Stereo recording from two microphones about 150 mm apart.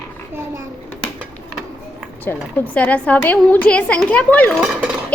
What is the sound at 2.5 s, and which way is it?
A child's voice, 10° left (ahead or behind).